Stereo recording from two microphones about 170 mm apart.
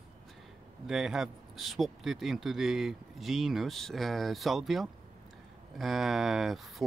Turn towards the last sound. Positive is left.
turn(degrees=0)  # may be behind; listen again after turning